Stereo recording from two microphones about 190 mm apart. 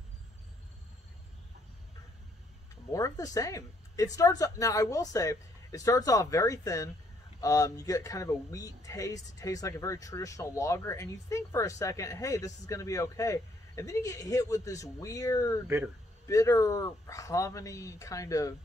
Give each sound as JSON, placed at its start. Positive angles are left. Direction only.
{"t": 2.9, "sound": "speech", "side_deg": 15}
{"t": 15.6, "sound": "speech", "side_deg": -10}
{"t": 16.3, "sound": "speech", "side_deg": 15}